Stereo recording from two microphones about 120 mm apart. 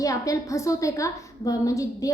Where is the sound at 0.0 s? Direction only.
30° left (ahead or behind).